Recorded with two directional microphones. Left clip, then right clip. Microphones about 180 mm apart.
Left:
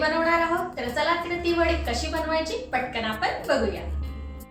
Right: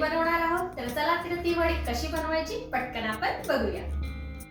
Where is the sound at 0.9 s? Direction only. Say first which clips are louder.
Left 3 dB; 5° left (ahead or behind).